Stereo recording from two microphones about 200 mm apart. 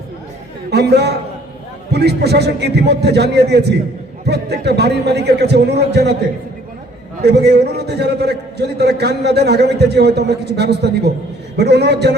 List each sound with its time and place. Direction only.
0.7 s a man's voice: 55° right (ahead or behind)
7.3 s a man's voice: 55° right (ahead or behind)